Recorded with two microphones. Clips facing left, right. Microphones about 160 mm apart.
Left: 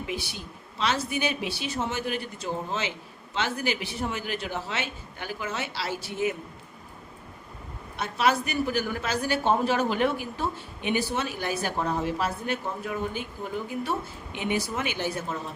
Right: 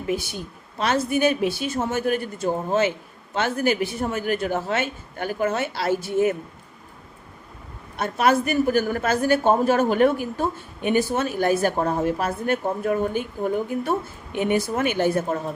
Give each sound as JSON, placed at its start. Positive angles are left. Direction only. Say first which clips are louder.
{"t": 0.1, "sound": "a woman's voice", "louder": "right 8 dB", "side_deg": -45}
{"t": 7.9, "sound": "a woman's voice", "louder": "right 5 dB", "side_deg": -50}